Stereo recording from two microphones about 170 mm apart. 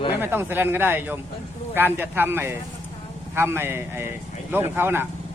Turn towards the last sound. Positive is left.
turn(degrees=-15)  # may be behind; listen again after turning